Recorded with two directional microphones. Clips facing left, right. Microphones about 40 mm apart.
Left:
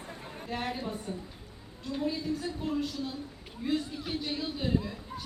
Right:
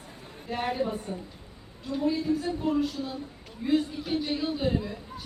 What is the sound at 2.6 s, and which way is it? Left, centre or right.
Speech, centre.